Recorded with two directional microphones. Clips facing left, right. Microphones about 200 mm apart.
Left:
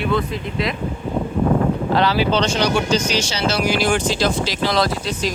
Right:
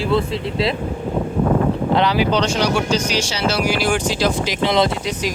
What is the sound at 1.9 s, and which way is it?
Speech, 20° right (ahead or behind).